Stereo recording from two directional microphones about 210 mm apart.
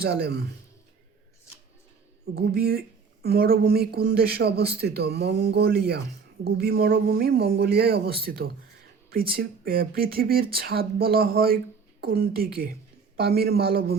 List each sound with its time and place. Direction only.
0.0 s a woman's voice: 50° right (ahead or behind)
2.3 s a woman's voice: 50° right (ahead or behind)